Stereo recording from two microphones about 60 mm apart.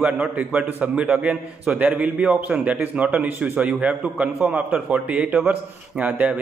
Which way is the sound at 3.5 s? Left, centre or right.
Right.